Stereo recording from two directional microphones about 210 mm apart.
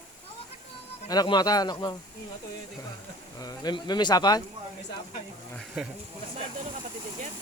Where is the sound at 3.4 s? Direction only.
20° left (ahead or behind).